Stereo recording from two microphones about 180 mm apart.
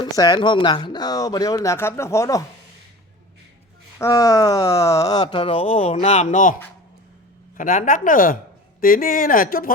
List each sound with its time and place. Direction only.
0.0 s speech: 20° left (ahead or behind)
3.9 s speech: 15° left (ahead or behind); by 9.7 s 50° left (ahead or behind)